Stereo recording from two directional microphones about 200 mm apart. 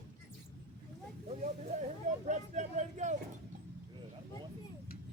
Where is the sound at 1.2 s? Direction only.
30° right (ahead or behind).